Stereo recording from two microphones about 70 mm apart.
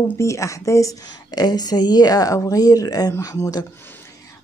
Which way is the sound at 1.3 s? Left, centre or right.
Left.